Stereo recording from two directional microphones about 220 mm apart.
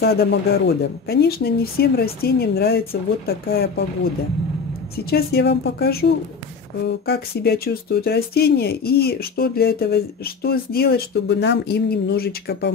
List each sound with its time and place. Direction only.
0.0 s speech: 45° left (ahead or behind)